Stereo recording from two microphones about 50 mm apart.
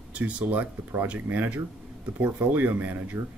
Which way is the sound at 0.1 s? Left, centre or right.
Right.